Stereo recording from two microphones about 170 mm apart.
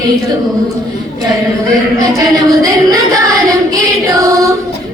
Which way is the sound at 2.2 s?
20° right (ahead or behind).